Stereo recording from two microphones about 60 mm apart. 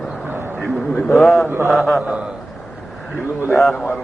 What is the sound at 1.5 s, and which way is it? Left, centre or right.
Speech, right.